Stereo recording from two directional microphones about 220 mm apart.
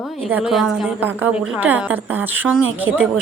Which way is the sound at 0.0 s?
Centre (ahead or behind).